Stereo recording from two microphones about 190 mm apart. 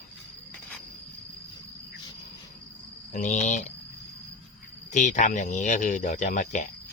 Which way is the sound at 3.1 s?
40° left (ahead or behind).